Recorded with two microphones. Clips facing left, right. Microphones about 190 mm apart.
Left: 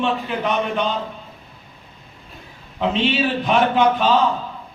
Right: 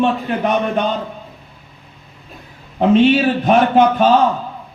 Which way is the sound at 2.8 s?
50° right (ahead or behind).